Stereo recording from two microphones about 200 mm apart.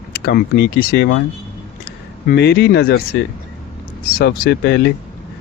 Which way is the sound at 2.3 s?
55° left (ahead or behind).